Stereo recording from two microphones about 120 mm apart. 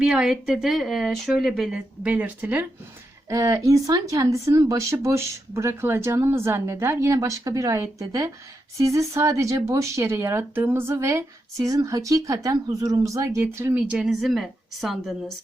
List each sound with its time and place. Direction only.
0.0 s speech: 5° right (ahead or behind)
2.0 s speech: 10° right (ahead or behind)
3.2 s speech: 25° right (ahead or behind)
13.9 s speech: centre (ahead or behind)